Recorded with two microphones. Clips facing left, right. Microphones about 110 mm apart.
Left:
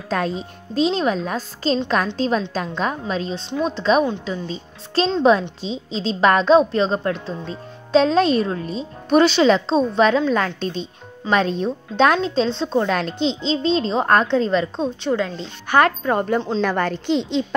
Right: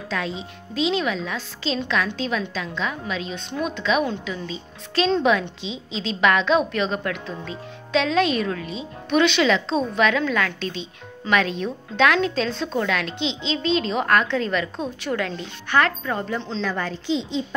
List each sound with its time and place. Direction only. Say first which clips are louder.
0.1 s a woman's voice: left 6 dB; 45° left (ahead or behind); by 15.4 s 20° left (ahead or behind)
15.7 s a woman's voice: left 5 dB; 40° left (ahead or behind); by 17.6 s 65° left (ahead or behind)